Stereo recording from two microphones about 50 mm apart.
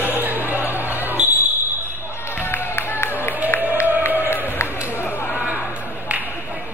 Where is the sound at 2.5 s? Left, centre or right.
Left.